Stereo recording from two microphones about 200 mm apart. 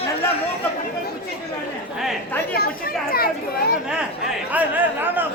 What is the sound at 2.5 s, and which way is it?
Speech, 50° left (ahead or behind).